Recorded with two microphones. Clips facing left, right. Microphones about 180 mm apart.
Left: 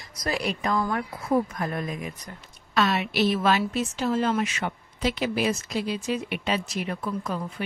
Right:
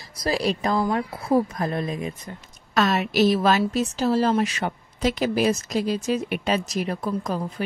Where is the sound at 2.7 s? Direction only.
40° right (ahead or behind).